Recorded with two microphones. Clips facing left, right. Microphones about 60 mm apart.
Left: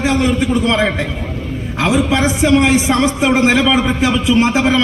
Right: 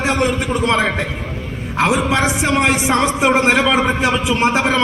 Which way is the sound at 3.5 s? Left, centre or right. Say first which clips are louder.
Left 1 dB; right.